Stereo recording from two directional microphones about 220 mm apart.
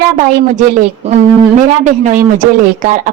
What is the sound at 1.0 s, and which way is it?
A woman's voice, 30° right (ahead or behind).